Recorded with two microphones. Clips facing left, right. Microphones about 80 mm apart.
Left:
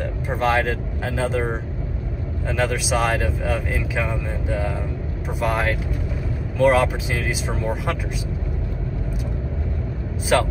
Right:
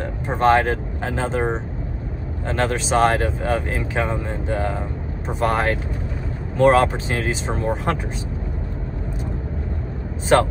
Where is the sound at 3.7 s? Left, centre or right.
Right.